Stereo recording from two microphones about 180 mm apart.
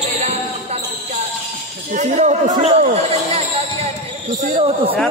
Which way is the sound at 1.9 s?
40° right (ahead or behind).